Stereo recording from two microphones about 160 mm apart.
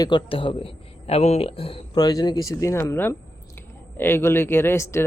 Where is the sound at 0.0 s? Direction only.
30° left (ahead or behind).